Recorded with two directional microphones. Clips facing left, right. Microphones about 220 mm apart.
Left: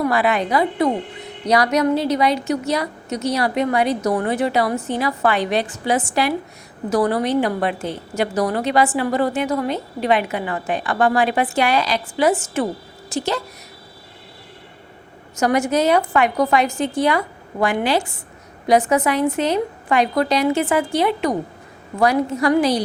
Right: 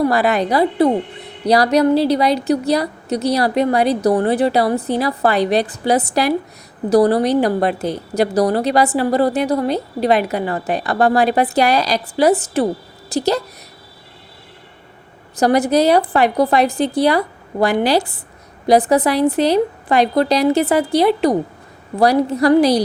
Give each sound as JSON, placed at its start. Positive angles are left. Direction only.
{"t": 0.0, "sound": "a woman's voice", "side_deg": -40}
{"t": 15.4, "sound": "a woman's voice", "side_deg": -35}